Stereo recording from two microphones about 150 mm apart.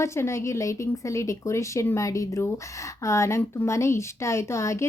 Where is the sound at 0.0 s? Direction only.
20° left (ahead or behind).